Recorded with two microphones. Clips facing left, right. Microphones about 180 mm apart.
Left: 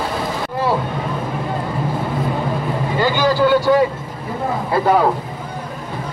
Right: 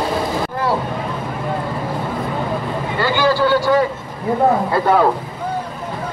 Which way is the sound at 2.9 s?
15° left (ahead or behind).